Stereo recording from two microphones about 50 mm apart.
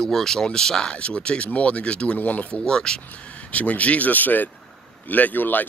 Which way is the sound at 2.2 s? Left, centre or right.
Left.